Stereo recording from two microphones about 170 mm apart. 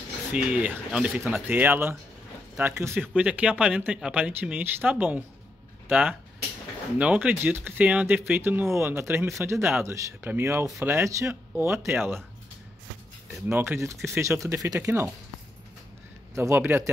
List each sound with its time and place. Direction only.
0.3 s speech: 10° right (ahead or behind)
13.5 s speech: 15° right (ahead or behind)
16.3 s speech: 15° right (ahead or behind)